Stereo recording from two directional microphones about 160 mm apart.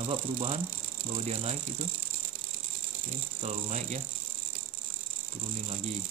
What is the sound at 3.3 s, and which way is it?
Ratchet, 40° right (ahead or behind).